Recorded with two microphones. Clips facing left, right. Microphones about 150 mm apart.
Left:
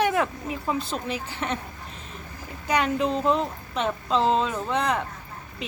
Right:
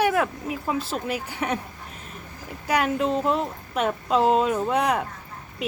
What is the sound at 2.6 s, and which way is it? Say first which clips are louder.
A woman's voice: right 1 dB; 5° right (ahead or behind).